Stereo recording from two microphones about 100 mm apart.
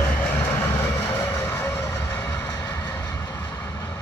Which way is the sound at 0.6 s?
25° left (ahead or behind).